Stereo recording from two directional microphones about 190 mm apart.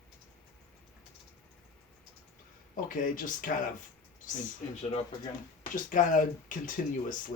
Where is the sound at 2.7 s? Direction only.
45° left (ahead or behind).